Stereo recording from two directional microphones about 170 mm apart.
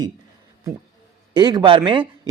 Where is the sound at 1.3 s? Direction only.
25° right (ahead or behind).